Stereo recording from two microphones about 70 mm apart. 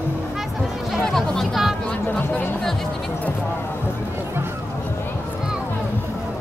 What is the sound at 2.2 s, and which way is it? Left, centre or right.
Music, left.